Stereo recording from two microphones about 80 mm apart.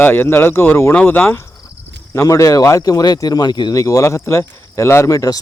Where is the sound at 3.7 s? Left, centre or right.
Left.